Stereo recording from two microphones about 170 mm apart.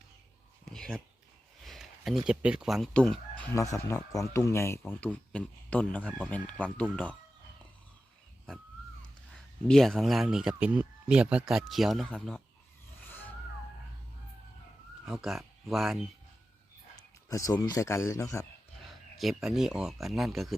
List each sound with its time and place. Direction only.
0.7 s speech: 5° left (ahead or behind)
1.6 s a sound: centre (ahead or behind)
2.2 s speech: 5° right (ahead or behind)
8.5 s a man's voice: 5° left (ahead or behind)
13.0 s a sound: 10° left (ahead or behind)
15.0 s speech: centre (ahead or behind)
17.2 s a man's voice: 20° left (ahead or behind)
19.1 s speech: centre (ahead or behind)